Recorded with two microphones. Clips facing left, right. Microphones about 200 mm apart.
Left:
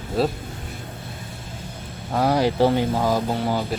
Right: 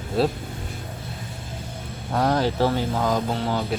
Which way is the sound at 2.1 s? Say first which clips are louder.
Left 2 dB; 5° left (ahead or behind).